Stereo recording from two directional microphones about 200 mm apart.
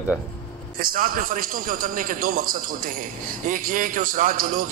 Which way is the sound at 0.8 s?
45° right (ahead or behind).